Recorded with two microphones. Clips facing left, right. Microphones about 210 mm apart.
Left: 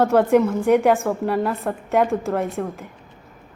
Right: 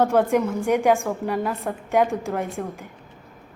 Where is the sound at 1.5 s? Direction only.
Centre (ahead or behind).